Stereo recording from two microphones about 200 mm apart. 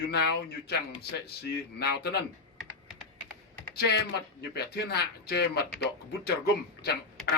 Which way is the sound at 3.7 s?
55° left (ahead or behind).